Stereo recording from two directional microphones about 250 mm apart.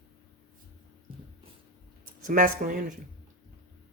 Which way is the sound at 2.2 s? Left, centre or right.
Right.